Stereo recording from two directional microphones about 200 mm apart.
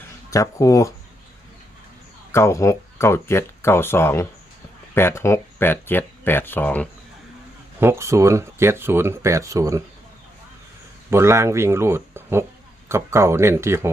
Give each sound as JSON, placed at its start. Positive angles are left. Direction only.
{"t": 0.3, "sound": "speech", "side_deg": 15}
{"t": 2.3, "sound": "speech", "side_deg": 15}
{"t": 7.8, "sound": "speech", "side_deg": -10}
{"t": 11.1, "sound": "speech", "side_deg": -15}